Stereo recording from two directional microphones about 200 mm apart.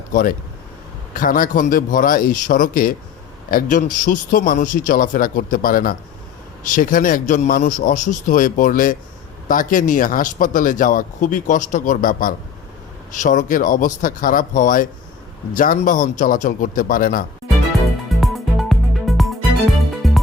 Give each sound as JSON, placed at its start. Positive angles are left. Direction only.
{"t": 0.1, "sound": "speech", "side_deg": 45}
{"t": 18.2, "sound": "music", "side_deg": 0}